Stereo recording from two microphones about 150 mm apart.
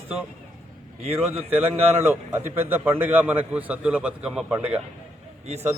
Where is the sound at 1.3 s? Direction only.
15° right (ahead or behind).